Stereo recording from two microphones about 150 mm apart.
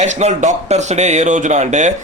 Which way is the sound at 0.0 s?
50° right (ahead or behind).